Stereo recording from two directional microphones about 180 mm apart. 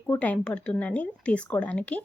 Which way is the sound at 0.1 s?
10° left (ahead or behind).